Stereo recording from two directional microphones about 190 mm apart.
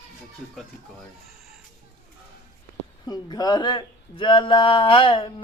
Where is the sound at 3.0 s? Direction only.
20° left (ahead or behind).